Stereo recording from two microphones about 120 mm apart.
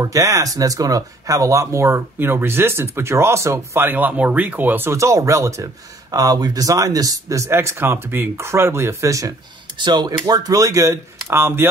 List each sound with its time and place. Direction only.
0.0 s speech: 30° right (ahead or behind)
9.8 s speech: 40° right (ahead or behind); by 11.6 s 20° right (ahead or behind)